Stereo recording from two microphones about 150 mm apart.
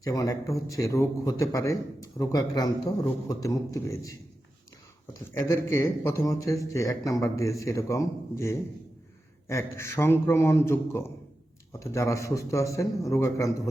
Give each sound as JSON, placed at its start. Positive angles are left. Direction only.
{"t": 0.0, "sound": "a man's voice", "side_deg": 25}
{"t": 5.3, "sound": "a man's voice", "side_deg": 20}